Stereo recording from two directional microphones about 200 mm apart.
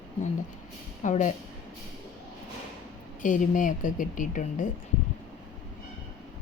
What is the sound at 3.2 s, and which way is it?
A woman's voice, 40° left (ahead or behind).